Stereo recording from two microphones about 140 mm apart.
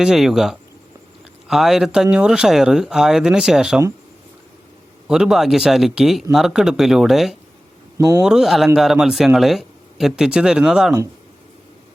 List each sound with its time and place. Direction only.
0.0 s speech: 5° right (ahead or behind)
5.0 s speech: 5° right (ahead or behind)
7.9 s speech: 25° right (ahead or behind)
8.2 s speech: 5° right (ahead or behind)